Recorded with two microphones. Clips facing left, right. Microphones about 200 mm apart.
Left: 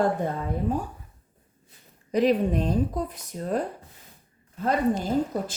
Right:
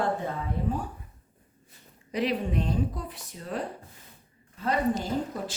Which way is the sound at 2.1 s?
40° left (ahead or behind).